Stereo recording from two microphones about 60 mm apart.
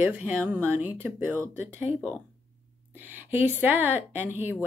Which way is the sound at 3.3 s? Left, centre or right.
Right.